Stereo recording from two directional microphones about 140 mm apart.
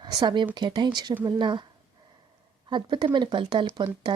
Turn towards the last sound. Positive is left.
turn(degrees=-35)  # may be behind; listen again after turning